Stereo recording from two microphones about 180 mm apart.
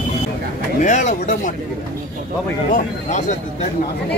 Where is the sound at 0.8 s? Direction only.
40° left (ahead or behind).